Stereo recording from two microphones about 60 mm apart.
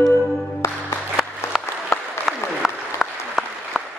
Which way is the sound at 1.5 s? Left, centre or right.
Centre.